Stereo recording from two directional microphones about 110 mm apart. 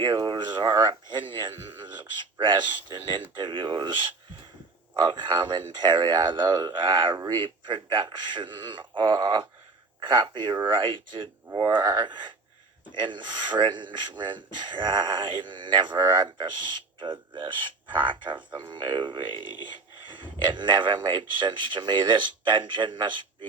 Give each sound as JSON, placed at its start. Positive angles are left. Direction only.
{"t": 0.0, "sound": "speech", "side_deg": -45}
{"t": 1.3, "sound": "speech", "side_deg": -50}